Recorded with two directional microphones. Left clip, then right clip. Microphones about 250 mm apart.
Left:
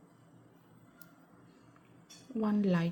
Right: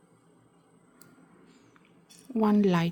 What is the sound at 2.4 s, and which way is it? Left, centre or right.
Speech, right.